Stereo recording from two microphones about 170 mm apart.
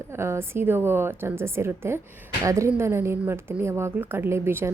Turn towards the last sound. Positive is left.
turn(degrees=-15)  # may be behind; listen again after turning